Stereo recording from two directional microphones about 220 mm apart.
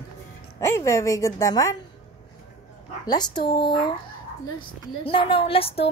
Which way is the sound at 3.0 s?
20° left (ahead or behind).